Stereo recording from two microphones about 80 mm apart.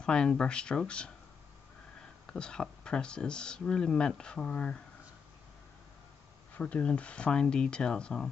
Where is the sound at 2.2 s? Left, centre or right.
Centre.